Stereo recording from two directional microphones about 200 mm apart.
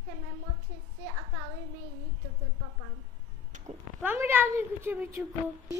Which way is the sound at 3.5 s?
35° right (ahead or behind).